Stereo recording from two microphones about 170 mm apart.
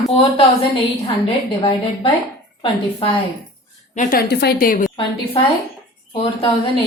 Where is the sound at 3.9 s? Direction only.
50° left (ahead or behind).